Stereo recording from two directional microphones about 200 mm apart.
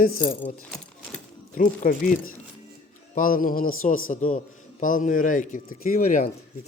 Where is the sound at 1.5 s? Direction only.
40° left (ahead or behind).